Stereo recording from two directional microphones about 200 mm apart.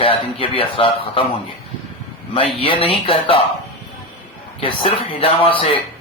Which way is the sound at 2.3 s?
25° left (ahead or behind).